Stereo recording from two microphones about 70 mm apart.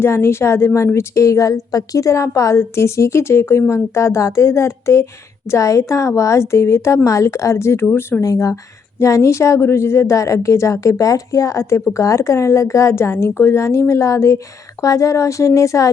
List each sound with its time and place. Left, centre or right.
0.0 s a woman's voice: left
8.2 s a woman's voice: left